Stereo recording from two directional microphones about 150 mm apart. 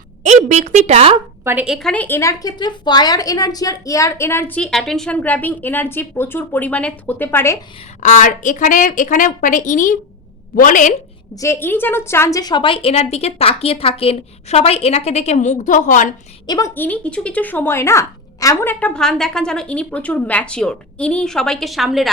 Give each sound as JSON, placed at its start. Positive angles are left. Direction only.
{"t": 0.2, "sound": "a woman's voice", "side_deg": -55}
{"t": 1.5, "sound": "a woman's voice", "side_deg": -10}
{"t": 8.0, "sound": "a woman's voice", "side_deg": 60}
{"t": 11.3, "sound": "a woman's voice", "side_deg": 20}
{"t": 16.5, "sound": "a woman's voice", "side_deg": 20}